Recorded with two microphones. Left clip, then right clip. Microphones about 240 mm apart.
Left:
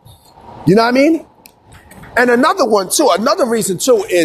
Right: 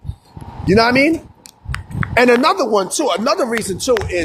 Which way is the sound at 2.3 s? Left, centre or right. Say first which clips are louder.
Left 2 dB; centre.